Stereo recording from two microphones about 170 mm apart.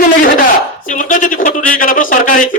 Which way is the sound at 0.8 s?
50° left (ahead or behind).